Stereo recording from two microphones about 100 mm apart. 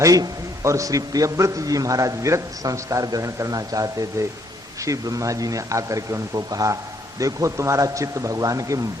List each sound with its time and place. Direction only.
0.0 s a man's voice: 35° right (ahead or behind)